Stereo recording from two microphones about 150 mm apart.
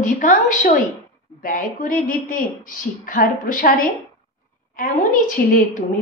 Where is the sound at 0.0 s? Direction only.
60° left (ahead or behind).